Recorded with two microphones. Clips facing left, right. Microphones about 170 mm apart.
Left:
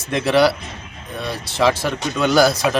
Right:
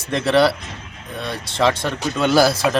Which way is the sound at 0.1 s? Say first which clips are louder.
Even; centre (ahead or behind).